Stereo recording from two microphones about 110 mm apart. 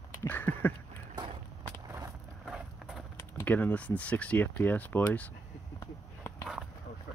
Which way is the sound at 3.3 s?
15° left (ahead or behind).